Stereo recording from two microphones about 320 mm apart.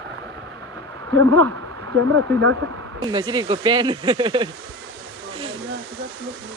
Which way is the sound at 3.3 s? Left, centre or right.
Centre.